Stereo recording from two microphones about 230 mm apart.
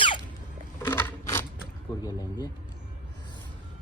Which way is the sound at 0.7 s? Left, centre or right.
Centre.